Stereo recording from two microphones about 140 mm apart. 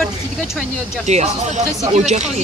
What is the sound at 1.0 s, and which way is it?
Speech, 55° right (ahead or behind).